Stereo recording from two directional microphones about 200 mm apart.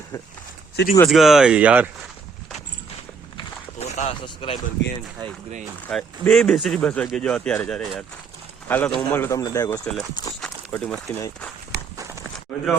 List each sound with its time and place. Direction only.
0.1 s speech: 15° left (ahead or behind)
0.8 s speech: 60° left (ahead or behind)
1.1 s speech: centre (ahead or behind)
3.3 s a sound: 35° left (ahead or behind)
4.8 s speech: 60° left (ahead or behind)
5.9 s speech: centre (ahead or behind)
10.4 s a sound: 5° left (ahead or behind)